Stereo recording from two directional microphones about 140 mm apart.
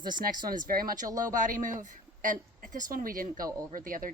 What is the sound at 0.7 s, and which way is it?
Speech, 90° right.